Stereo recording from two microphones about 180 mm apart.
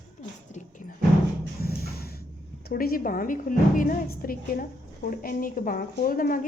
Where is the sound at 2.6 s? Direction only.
55° left (ahead or behind).